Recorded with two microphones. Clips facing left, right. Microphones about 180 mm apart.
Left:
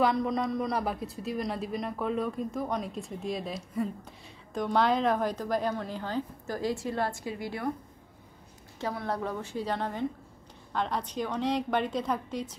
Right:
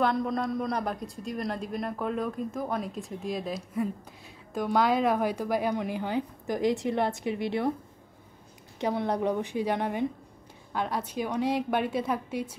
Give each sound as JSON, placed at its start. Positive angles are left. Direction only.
{"t": 0.0, "sound": "a woman's voice", "side_deg": 0}
{"t": 8.7, "sound": "a woman's voice", "side_deg": -20}